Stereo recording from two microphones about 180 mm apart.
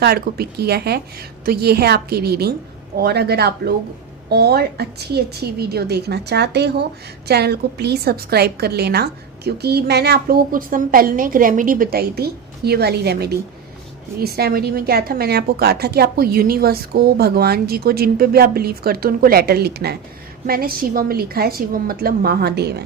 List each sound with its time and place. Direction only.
0.0 s a woman's voice: 60° right (ahead or behind)